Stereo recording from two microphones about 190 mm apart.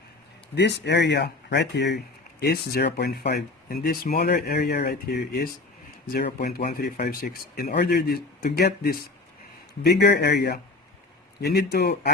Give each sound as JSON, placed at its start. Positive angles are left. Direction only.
{"t": 0.5, "sound": "speech", "side_deg": 65}